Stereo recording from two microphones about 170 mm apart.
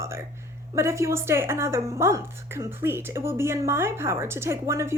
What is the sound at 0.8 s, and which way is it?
A woman's voice, 15° right (ahead or behind).